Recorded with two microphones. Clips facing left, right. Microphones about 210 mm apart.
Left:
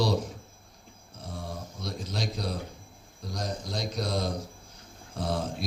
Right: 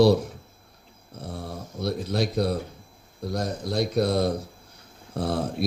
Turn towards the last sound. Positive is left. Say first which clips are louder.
# right 5 dB
turn(degrees=-60)  # may be behind; listen again after turning